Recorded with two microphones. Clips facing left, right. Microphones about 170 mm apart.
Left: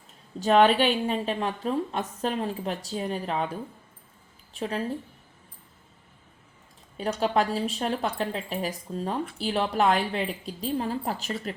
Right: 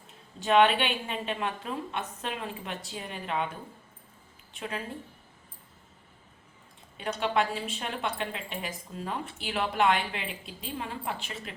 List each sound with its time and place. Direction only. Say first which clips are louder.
0.3 s speech: left 3 dB; 40° left (ahead or behind)
6.9 s speech: left 4 dB; 35° left (ahead or behind)